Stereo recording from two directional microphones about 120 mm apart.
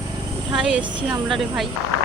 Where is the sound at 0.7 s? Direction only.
10° right (ahead or behind).